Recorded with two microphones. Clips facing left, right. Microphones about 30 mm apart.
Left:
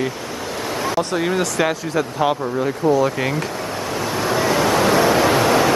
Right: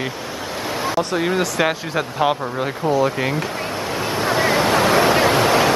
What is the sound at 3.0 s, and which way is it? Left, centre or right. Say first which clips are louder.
Speech: even; centre.